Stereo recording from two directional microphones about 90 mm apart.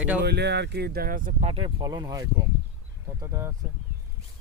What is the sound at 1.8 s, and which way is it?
Speech, 50° right (ahead or behind).